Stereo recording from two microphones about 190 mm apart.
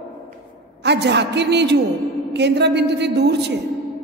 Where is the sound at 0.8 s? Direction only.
65° right (ahead or behind).